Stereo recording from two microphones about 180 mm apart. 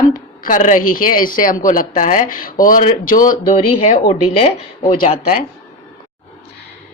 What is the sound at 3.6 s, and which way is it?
Speech, 30° left (ahead or behind).